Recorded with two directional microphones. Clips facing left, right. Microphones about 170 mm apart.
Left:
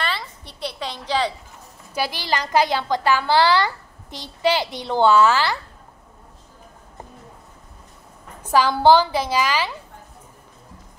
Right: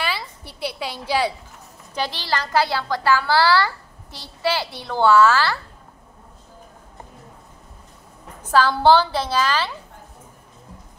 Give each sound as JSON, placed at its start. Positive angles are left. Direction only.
{"t": 0.0, "sound": "a woman's voice", "side_deg": -10}
{"t": 2.0, "sound": "a woman's voice", "side_deg": 10}
{"t": 8.5, "sound": "a woman's voice", "side_deg": 15}